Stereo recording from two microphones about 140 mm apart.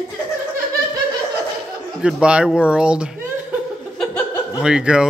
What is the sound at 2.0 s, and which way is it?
Speech, 5° right (ahead or behind).